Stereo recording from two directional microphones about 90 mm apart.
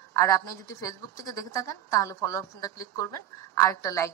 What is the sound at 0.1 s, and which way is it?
A woman's voice, 35° left (ahead or behind).